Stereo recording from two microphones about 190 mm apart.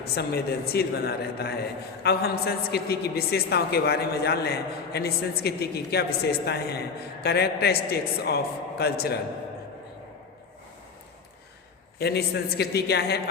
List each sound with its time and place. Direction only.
0.2 s a woman's voice: 55° left (ahead or behind)
11.9 s a woman's voice: 60° left (ahead or behind)